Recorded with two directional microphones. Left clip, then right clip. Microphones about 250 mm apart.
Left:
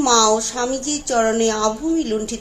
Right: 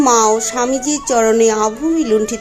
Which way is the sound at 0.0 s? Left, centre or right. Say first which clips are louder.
Right 3 dB; right.